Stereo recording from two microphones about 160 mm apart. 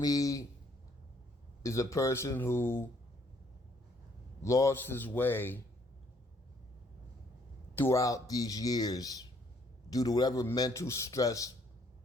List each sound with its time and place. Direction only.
0.0 s a man's voice: 20° left (ahead or behind)
1.6 s speech: 20° left (ahead or behind)
4.4 s speech: 20° left (ahead or behind)
7.8 s speech: 20° left (ahead or behind)